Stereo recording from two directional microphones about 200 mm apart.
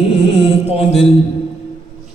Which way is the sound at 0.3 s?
30° left (ahead or behind).